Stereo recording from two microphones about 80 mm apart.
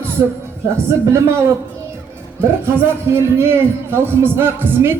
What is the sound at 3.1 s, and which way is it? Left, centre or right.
A man's voice, right.